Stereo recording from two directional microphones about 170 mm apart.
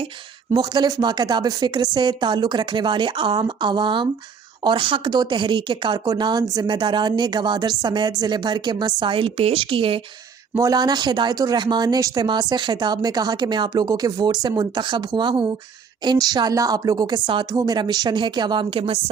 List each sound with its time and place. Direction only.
0.5 s a woman's voice: 25° right (ahead or behind)
10.5 s speech: 20° right (ahead or behind)